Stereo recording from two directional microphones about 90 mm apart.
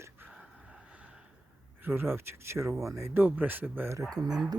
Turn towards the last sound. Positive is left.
turn(degrees=-45)  # may be behind; listen again after turning